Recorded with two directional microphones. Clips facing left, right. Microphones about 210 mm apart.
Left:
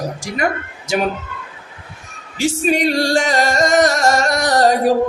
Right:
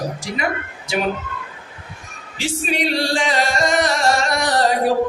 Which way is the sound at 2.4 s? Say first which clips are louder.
Left 6 dB; 45° left (ahead or behind).